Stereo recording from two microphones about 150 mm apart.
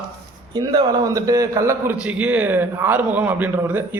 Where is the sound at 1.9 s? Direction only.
10° right (ahead or behind).